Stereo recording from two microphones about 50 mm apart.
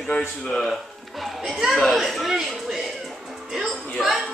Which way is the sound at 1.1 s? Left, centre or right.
Centre.